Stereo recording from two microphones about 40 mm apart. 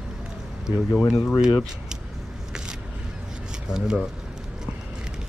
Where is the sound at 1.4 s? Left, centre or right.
Centre.